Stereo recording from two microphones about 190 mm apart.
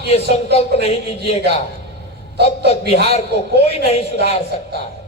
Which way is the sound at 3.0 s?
35° left (ahead or behind).